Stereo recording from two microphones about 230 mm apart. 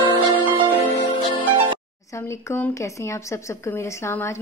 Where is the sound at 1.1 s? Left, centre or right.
Left.